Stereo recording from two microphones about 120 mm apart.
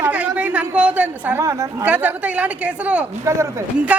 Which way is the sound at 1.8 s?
15° right (ahead or behind).